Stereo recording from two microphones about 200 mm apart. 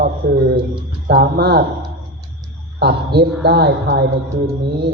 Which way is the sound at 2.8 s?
55° right (ahead or behind).